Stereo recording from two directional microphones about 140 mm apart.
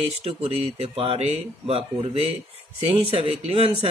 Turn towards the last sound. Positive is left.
turn(degrees=-45)  # may be behind; listen again after turning